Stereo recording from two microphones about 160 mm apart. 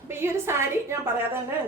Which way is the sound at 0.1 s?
15° right (ahead or behind).